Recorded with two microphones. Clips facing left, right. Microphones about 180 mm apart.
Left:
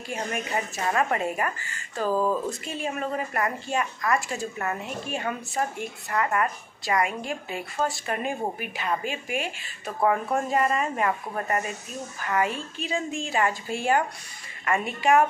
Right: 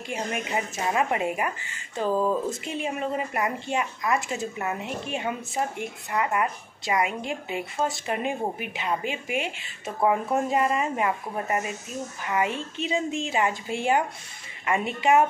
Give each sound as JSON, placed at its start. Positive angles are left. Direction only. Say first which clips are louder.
{"t": 0.1, "sound": "a woman's voice", "louder": "even", "side_deg": -15}